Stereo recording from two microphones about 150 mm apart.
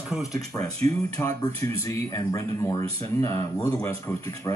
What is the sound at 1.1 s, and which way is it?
Speech, 20° left (ahead or behind).